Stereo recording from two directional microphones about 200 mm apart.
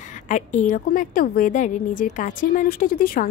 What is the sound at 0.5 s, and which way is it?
A woman's voice, 40° left (ahead or behind).